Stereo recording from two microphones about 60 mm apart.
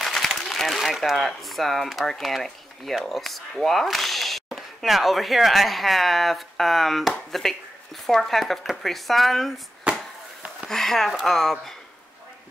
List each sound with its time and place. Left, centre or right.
0.0 s speech: centre
9.9 s a sound: centre
10.7 s speech: centre